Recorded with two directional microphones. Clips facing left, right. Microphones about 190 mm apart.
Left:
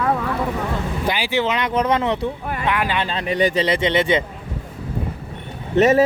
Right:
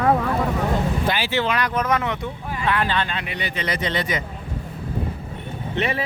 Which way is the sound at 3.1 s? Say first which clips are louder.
Left 10 dB; 40° left (ahead or behind).